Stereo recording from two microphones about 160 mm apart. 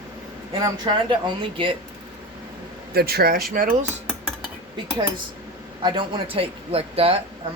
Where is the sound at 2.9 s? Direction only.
75° right (ahead or behind).